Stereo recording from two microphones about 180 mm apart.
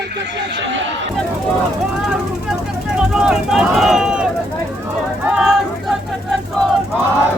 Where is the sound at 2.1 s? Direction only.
5° right (ahead or behind).